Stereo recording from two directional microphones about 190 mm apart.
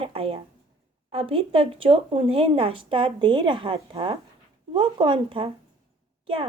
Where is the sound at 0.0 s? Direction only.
30° right (ahead or behind).